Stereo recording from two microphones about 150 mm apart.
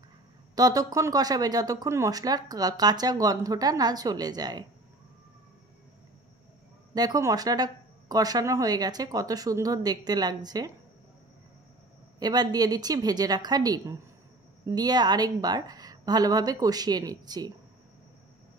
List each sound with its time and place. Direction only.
0.6 s speech: 25° right (ahead or behind)
6.9 s speech: 25° right (ahead or behind)
12.2 s speech: 25° right (ahead or behind)